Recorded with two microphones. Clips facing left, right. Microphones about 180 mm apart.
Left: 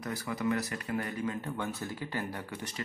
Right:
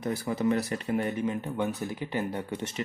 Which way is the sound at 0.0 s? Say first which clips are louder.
Right 5 dB; 30° right (ahead or behind).